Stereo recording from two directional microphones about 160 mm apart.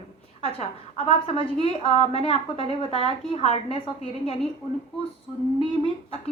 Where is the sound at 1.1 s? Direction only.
35° left (ahead or behind).